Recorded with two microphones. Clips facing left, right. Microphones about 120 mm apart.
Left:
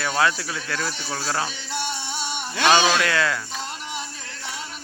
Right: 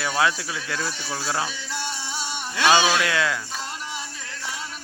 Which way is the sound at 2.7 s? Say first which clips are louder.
Left 1 dB; 10° right (ahead or behind).